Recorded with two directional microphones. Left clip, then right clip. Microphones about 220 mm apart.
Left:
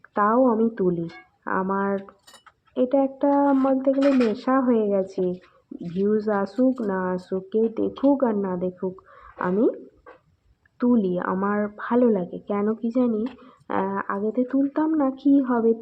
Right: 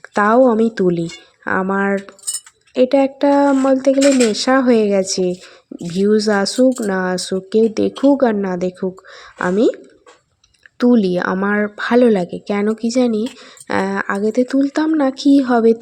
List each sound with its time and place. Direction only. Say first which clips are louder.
0.1 s a woman's voice: right 7 dB; 35° right (ahead or behind)
7.9 s a woman's voice: right 6 dB; 50° right (ahead or behind)
8.2 s a woman's voice: right 7 dB; 40° right (ahead or behind)